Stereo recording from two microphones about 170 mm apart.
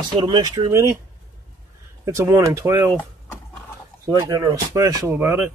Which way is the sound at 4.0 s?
20° right (ahead or behind).